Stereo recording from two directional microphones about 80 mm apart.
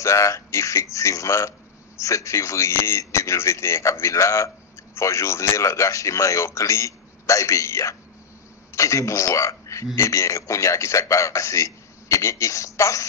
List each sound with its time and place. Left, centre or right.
0.0 s a man's voice: left